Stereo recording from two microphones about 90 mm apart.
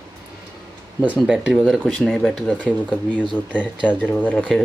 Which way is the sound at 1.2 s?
5° right (ahead or behind).